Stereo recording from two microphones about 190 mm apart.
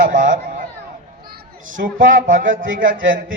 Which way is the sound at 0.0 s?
45° right (ahead or behind).